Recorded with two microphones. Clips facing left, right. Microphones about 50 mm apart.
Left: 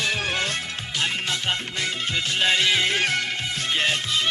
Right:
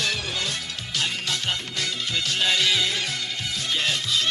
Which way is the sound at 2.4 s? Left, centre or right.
Left.